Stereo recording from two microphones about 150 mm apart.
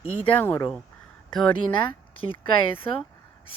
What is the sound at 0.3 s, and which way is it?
Speech, 15° left (ahead or behind).